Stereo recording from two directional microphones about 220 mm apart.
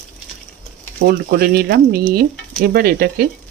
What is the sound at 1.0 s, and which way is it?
Speech, 45° right (ahead or behind).